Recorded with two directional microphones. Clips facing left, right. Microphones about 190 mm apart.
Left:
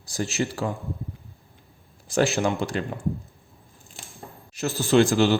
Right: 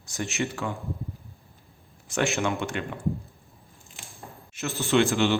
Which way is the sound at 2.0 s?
35° left (ahead or behind).